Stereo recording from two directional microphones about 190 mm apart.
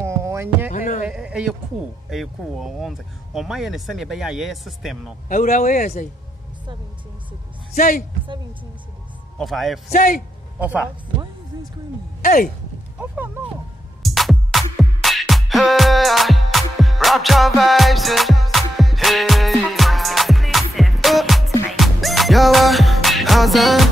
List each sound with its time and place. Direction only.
0.0 s hum: 15° right (ahead or behind)
0.7 s a sound: 40° left (ahead or behind)
1.0 s a sound: 5° right (ahead or behind)
2.0 s speech: centre (ahead or behind)
5.3 s speech: 45° left (ahead or behind)
7.7 s speech: 45° left (ahead or behind)
9.4 s speech: centre (ahead or behind)
9.8 s speech: 45° left (ahead or behind)
10.6 s speech: 10° right (ahead or behind)
12.2 s speech: 45° left (ahead or behind)
13.0 s speech: 10° right (ahead or behind)
14.0 s music: centre (ahead or behind)